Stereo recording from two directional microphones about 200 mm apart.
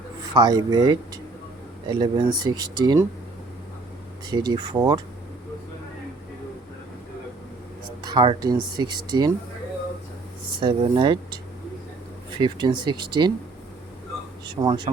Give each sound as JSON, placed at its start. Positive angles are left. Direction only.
{"t": 0.4, "sound": "speech", "side_deg": -20}
{"t": 4.3, "sound": "speech", "side_deg": -20}
{"t": 8.0, "sound": "speech", "side_deg": -20}
{"t": 10.6, "sound": "speech", "side_deg": -25}
{"t": 12.4, "sound": "speech", "side_deg": -20}
{"t": 14.5, "sound": "speech", "side_deg": -20}